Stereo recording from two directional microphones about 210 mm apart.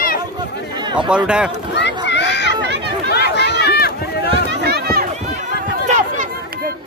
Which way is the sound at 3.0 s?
50° left (ahead or behind).